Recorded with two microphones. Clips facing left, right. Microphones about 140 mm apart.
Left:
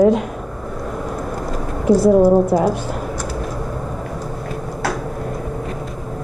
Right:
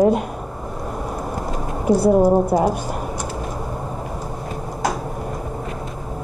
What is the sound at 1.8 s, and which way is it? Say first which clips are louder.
Speech: left 3 dB; 10° right (ahead or behind).